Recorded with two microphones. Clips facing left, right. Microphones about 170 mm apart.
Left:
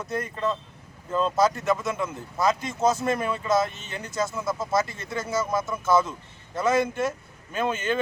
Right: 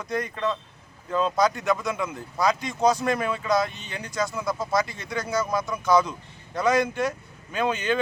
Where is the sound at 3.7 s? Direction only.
45° left (ahead or behind).